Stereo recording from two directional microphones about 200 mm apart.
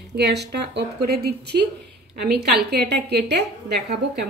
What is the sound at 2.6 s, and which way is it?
A woman's voice, 55° right (ahead or behind).